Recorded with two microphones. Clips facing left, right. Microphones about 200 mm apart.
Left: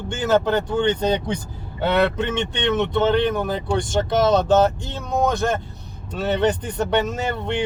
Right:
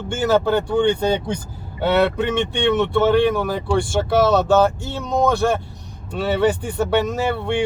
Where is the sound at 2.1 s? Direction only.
10° right (ahead or behind).